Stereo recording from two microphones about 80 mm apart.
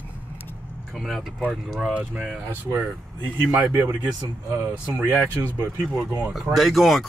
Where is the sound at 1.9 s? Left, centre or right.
Centre.